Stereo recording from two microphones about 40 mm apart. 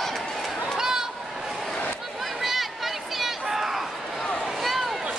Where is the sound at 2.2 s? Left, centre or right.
Centre.